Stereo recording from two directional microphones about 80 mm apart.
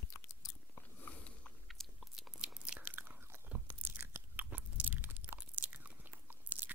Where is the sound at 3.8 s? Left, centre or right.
Right.